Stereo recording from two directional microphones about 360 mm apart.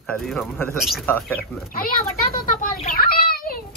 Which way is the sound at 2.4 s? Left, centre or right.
Left.